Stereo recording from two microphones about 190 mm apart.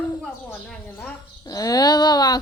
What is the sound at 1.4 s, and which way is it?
Speech, 20° left (ahead or behind).